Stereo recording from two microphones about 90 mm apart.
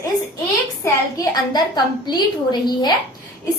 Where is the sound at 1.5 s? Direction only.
50° left (ahead or behind).